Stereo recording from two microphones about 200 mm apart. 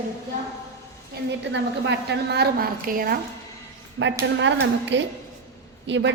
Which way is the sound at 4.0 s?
90° right.